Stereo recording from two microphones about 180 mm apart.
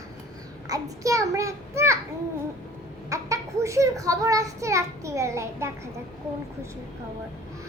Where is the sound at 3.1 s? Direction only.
15° right (ahead or behind).